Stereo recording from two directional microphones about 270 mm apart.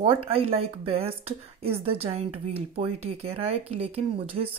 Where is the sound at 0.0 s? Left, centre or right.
Right.